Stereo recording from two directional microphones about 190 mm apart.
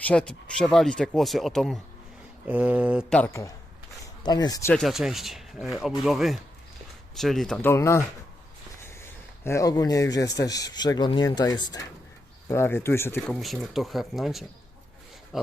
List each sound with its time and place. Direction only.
0.0 s speech: 5° left (ahead or behind)
2.5 s mantra: 5° right (ahead or behind)
3.1 s speech: 10° left (ahead or behind)
4.7 s speech: centre (ahead or behind)
7.7 s speech: 15° left (ahead or behind)
13.4 s speech: centre (ahead or behind)